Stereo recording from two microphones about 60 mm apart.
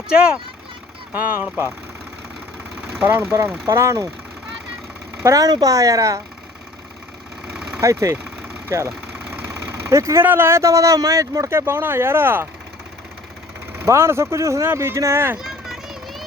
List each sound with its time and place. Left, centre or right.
1.4 s speech: right
2.9 s speech: right
3.7 s a woman's voice: right
5.2 s a woman's voice: right
7.4 s engine: centre
7.8 s a woman's voice: right
8.1 s vehicle: right
8.6 s speech: right
9.6 s vehicle: right
9.9 s a woman's voice: right
10.2 s speech: right
10.6 s speech: right
13.8 s speech: right
15.4 s vehicle: centre